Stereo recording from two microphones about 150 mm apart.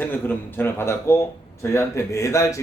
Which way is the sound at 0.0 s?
15° left (ahead or behind).